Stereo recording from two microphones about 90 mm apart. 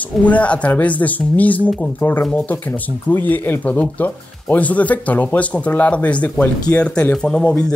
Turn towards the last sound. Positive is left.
turn(degrees=10)  # may be behind; listen again after turning